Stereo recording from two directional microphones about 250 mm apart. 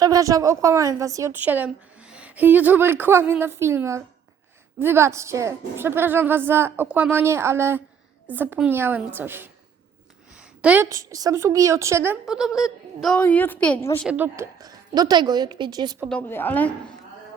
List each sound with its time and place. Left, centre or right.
0.0 s a woman's voice: centre
14.1 s a woman's voice: centre
16.0 s a woman's voice: centre